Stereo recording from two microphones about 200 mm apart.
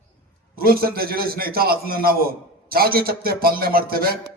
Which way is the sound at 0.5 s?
50° right (ahead or behind).